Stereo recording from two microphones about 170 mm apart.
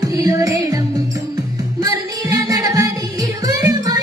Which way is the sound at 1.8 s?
20° right (ahead or behind).